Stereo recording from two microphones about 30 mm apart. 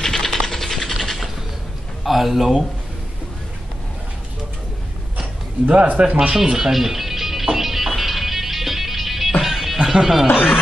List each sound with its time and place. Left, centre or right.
0.0 s a sound: centre
2.0 s speech: centre
5.7 s speech: right
6.5 s music: centre
9.9 s speech: centre
10.3 s speech: right